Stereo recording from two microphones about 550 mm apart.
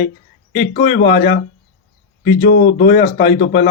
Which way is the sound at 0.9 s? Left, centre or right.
Left.